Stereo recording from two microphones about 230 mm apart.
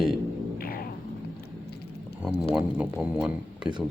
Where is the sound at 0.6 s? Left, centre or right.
Left.